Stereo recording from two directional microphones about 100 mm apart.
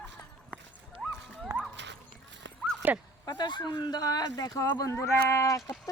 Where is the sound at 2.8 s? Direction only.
15° right (ahead or behind).